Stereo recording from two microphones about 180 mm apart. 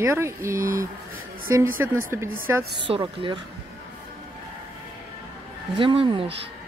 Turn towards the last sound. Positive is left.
turn(degrees=-30)  # may be behind; listen again after turning